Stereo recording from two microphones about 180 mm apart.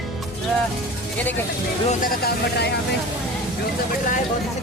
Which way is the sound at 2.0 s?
60° left (ahead or behind).